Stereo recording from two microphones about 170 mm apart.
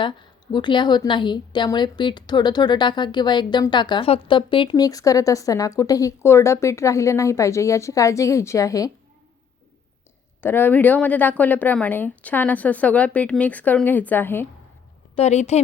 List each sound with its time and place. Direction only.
0.0 s a woman's voice: 25° left (ahead or behind)
10.4 s speech: 10° left (ahead or behind)
15.1 s a woman's voice: 40° left (ahead or behind)